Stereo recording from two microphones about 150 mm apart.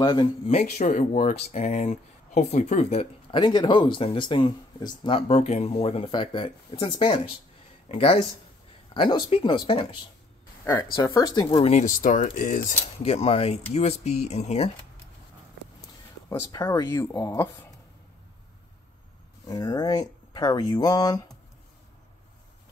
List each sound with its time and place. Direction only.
0.0 s speech: 30° left (ahead or behind)
0.5 s speech: 50° left (ahead or behind)
10.6 s speech: 20° left (ahead or behind)
11.5 s speech: 40° left (ahead or behind)
11.8 s speech: 60° left (ahead or behind)
13.0 s speech: 40° left (ahead or behind)
16.3 s speech: 20° left (ahead or behind)
19.4 s speech: 25° left (ahead or behind)